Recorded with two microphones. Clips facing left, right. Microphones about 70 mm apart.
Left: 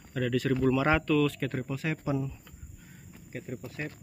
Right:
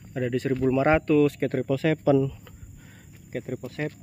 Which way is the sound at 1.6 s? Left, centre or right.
Right.